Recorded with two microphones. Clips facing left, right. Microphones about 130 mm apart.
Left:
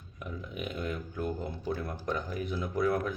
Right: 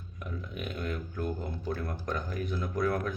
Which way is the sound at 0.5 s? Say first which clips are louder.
Left 1 dB; 15° left (ahead or behind).